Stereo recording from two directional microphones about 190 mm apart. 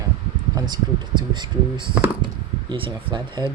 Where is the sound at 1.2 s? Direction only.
25° right (ahead or behind).